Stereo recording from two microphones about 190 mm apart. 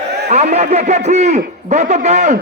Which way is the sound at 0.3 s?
35° right (ahead or behind).